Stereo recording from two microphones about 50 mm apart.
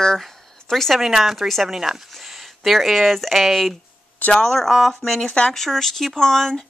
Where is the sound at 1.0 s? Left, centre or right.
Centre.